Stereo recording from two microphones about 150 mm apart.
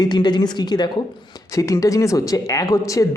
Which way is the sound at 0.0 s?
30° left (ahead or behind).